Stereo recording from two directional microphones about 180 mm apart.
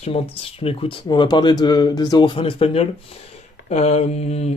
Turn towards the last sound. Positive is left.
turn(degrees=35)  # may be behind; listen again after turning